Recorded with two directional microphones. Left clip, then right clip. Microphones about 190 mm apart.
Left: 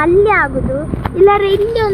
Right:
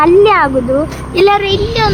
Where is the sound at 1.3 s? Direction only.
5° right (ahead or behind).